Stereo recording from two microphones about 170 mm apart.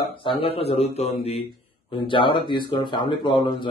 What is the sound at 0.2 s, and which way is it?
A man's voice, 30° left (ahead or behind).